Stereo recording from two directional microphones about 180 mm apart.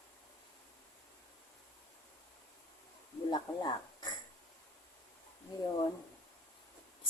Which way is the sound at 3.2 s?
25° left (ahead or behind).